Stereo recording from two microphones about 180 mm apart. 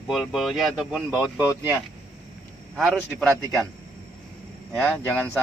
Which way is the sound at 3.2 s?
15° right (ahead or behind).